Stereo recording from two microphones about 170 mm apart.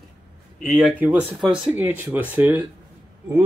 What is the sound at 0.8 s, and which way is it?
Speech, 10° right (ahead or behind).